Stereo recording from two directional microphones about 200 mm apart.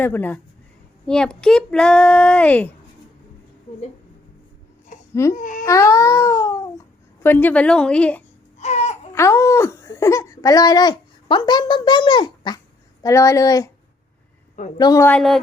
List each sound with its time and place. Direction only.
0.0 s speech: 10° left (ahead or behind)
4.9 s babbling: 40° left (ahead or behind)
5.3 s speech: 40° left (ahead or behind)
5.6 s speech: 15° left (ahead or behind)
8.5 s baby cry: 35° left (ahead or behind)
9.1 s speech: 15° left (ahead or behind)
14.8 s speech: 15° left (ahead or behind)